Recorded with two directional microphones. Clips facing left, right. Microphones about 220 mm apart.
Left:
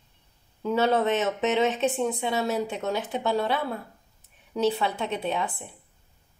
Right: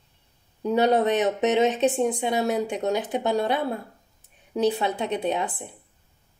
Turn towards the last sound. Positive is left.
turn(degrees=-20)  # may be behind; listen again after turning